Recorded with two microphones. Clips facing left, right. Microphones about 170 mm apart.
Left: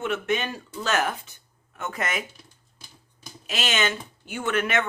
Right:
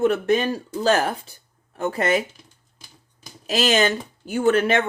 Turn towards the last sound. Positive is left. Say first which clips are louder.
# right 7 dB
turn(degrees=-30)  # may be behind; listen again after turning